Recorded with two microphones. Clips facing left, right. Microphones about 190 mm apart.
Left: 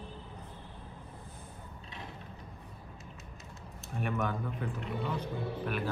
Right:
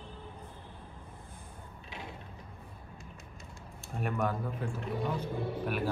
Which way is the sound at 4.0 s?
Centre (ahead or behind).